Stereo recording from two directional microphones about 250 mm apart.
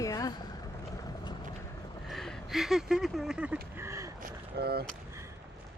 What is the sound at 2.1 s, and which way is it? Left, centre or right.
Speech, centre.